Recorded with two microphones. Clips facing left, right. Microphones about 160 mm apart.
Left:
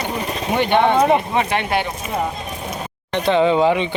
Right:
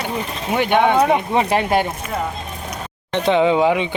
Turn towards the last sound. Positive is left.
turn(degrees=-10)  # may be behind; listen again after turning